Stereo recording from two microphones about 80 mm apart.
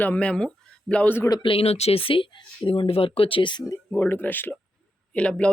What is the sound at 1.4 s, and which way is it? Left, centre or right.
Speech, left.